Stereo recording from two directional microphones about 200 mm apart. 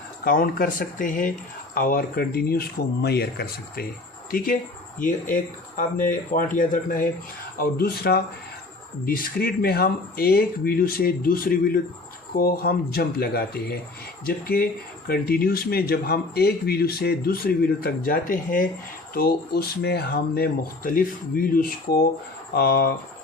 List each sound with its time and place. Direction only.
0.3 s speech: 45° left (ahead or behind)